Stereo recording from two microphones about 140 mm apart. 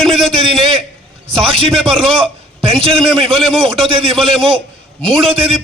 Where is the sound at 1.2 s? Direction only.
40° right (ahead or behind).